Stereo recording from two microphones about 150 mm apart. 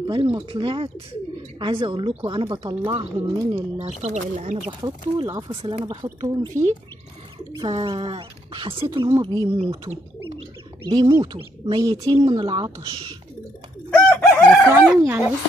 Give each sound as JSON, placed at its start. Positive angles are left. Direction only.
{"t": 0.0, "sound": "speech", "side_deg": -35}
{"t": 3.2, "sound": "speech", "side_deg": -20}
{"t": 4.0, "sound": "speech", "side_deg": -50}
{"t": 4.8, "sound": "speech", "side_deg": -30}
{"t": 5.9, "sound": "speech", "side_deg": -25}
{"t": 7.7, "sound": "speech", "side_deg": -35}
{"t": 10.9, "sound": "speech", "side_deg": -25}
{"t": 13.8, "sound": "crowing", "side_deg": 5}
{"t": 14.7, "sound": "speech", "side_deg": -15}